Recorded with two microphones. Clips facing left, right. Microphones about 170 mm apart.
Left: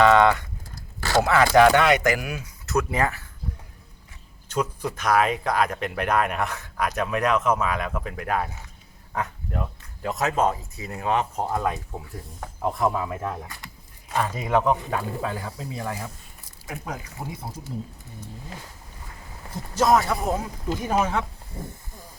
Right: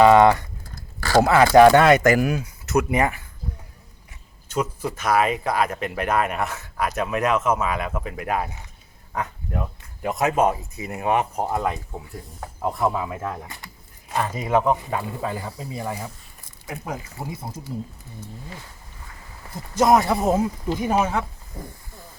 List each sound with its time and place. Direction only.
0.0 s speech: 15° right (ahead or behind)
1.1 s speech: 30° right (ahead or behind)
1.8 s speech: 45° right (ahead or behind)
2.6 s speech: 15° right (ahead or behind)
4.4 s speech: 10° right (ahead or behind)
17.2 s speech: 35° right (ahead or behind)
19.7 s speech: 15° right (ahead or behind)
20.8 s speech: 5° right (ahead or behind)